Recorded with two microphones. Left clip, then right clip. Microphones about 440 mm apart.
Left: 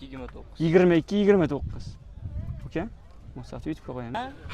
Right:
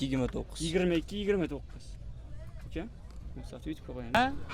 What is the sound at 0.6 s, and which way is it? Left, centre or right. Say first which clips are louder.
Speech: left 10 dB; left.